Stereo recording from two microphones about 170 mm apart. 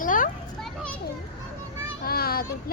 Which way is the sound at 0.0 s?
50° left (ahead or behind).